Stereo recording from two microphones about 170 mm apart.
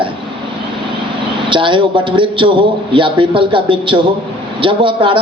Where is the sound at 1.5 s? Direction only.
30° right (ahead or behind).